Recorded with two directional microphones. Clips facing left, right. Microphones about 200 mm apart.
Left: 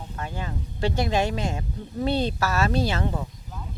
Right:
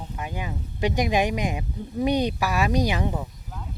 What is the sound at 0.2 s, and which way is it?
Speech, 15° right (ahead or behind).